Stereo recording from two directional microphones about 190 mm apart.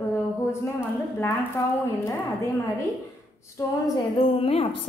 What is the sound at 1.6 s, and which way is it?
Speech, 15° left (ahead or behind).